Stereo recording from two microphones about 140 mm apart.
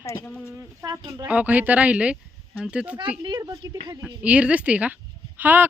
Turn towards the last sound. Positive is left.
turn(degrees=-15)  # may be behind; listen again after turning